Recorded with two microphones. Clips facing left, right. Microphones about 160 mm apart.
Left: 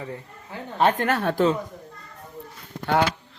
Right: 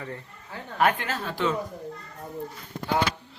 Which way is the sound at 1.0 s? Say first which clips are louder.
Left 9 dB; 60° left (ahead or behind).